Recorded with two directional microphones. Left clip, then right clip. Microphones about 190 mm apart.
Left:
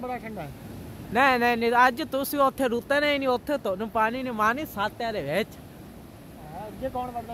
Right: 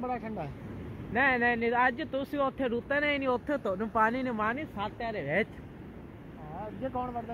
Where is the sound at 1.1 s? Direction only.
25° left (ahead or behind); by 4.4 s centre (ahead or behind).